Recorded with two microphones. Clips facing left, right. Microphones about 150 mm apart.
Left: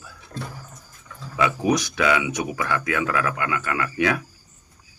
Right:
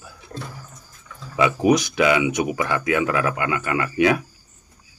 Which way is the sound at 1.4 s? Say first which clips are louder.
Right 4 dB; 15° right (ahead or behind).